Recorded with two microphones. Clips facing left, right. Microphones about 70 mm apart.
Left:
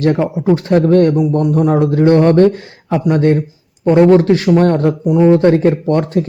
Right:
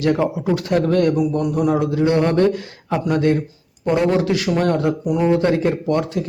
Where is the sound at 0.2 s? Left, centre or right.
Left.